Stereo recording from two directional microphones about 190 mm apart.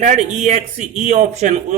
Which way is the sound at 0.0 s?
35° right (ahead or behind).